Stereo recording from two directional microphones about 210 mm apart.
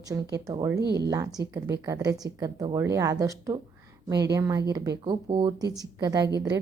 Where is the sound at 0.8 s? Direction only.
50° right (ahead or behind).